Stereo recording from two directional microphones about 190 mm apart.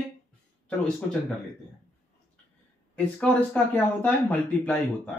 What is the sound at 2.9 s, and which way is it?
Speech, 5° left (ahead or behind).